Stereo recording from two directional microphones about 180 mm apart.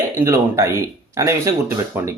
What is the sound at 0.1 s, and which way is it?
Speech, 15° right (ahead or behind).